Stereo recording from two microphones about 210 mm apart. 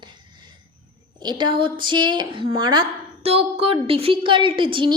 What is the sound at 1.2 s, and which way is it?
A woman's voice, 20° right (ahead or behind).